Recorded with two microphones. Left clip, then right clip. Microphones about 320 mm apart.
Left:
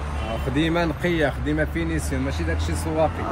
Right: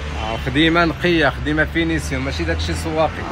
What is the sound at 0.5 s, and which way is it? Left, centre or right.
Speech, centre.